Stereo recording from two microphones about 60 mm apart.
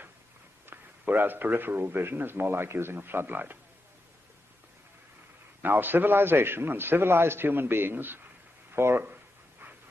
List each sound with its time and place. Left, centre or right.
0.7 s speech: right
5.6 s speech: right
8.7 s a sound: right